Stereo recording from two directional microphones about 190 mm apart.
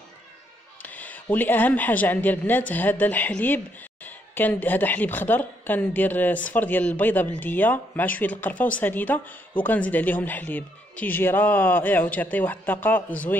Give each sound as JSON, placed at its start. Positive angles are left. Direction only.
{"t": 0.8, "sound": "a woman's voice", "side_deg": 10}